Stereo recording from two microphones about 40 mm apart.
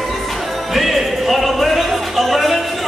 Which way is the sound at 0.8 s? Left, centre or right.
Centre.